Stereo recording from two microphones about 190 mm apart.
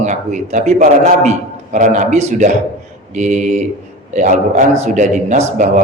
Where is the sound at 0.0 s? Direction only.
40° right (ahead or behind).